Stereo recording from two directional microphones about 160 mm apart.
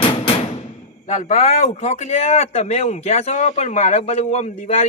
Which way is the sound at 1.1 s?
50° left (ahead or behind).